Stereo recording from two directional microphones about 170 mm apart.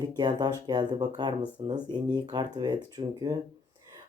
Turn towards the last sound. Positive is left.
turn(degrees=-25)  # may be behind; listen again after turning